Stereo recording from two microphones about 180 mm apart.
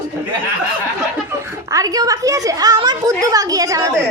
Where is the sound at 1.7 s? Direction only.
20° right (ahead or behind).